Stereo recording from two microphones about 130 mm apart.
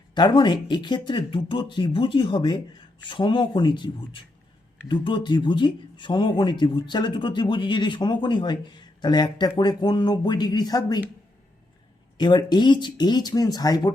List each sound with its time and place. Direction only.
0.1 s speech: 35° left (ahead or behind)
12.1 s speech: 35° left (ahead or behind)